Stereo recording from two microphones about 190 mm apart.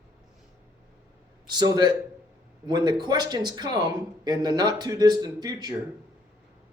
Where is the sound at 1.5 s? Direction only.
20° right (ahead or behind).